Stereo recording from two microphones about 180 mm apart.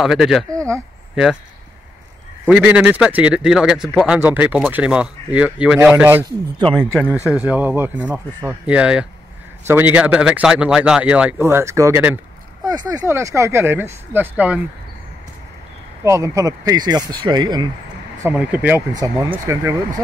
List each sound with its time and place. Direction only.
0.0 s speech: 5° right (ahead or behind)
0.5 s speech: 15° right (ahead or behind)
2.4 s speech: 10° right (ahead or behind)
6.9 s speech: 10° left (ahead or behind)
7.4 s speech: 10° right (ahead or behind)
16.0 s speech: 15° right (ahead or behind)
18.2 s speech: 10° right (ahead or behind)
18.9 s speech: 20° right (ahead or behind)